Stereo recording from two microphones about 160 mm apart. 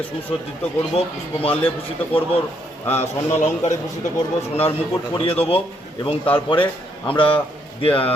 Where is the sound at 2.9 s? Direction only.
45° left (ahead or behind).